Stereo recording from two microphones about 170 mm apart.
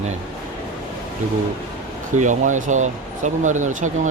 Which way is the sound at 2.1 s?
45° right (ahead or behind).